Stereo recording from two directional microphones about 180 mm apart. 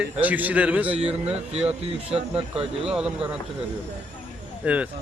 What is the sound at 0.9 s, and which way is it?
Speech, 30° right (ahead or behind).